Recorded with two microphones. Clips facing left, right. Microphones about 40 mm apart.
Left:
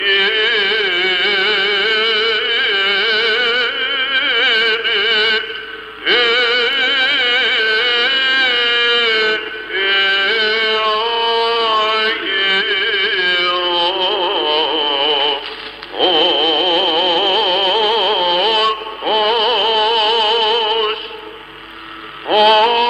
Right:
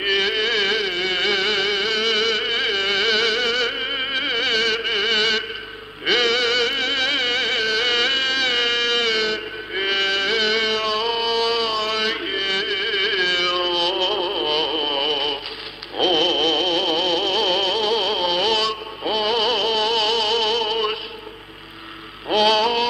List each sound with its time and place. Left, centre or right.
0.0 s music: left
22.3 s hum: left